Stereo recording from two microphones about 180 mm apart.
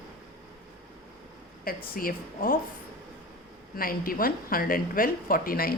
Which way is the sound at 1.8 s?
55° left (ahead or behind).